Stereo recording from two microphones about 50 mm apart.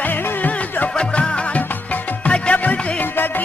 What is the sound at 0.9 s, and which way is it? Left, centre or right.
Music, centre.